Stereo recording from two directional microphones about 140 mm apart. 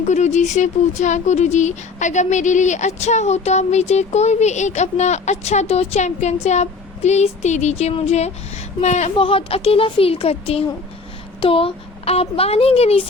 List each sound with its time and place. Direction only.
0.0 s speech: 55° left (ahead or behind)